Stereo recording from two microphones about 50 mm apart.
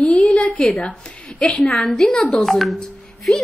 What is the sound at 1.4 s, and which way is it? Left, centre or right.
A woman's voice, centre.